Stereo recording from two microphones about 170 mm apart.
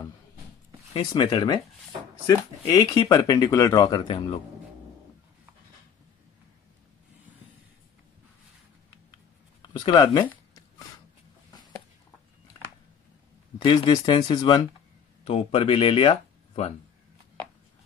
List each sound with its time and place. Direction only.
0.9 s speech: 25° left (ahead or behind)
9.6 s speech: 25° left (ahead or behind)
13.6 s speech: 25° left (ahead or behind)
15.2 s speech: 35° left (ahead or behind)